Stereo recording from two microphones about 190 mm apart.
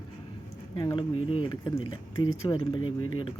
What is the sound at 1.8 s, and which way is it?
Speech, 90° left.